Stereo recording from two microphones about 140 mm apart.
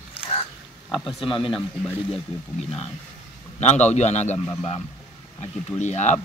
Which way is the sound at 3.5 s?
55° left (ahead or behind).